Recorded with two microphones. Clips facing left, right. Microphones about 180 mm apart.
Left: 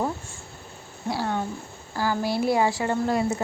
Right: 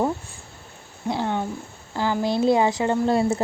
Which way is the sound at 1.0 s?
20° right (ahead or behind).